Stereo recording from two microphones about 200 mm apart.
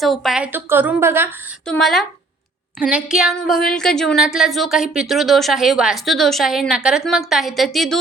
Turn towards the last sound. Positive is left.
turn(degrees=0)  # may be behind; listen again after turning